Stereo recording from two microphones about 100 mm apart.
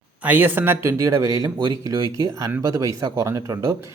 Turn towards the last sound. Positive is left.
turn(degrees=-30)  # may be behind; listen again after turning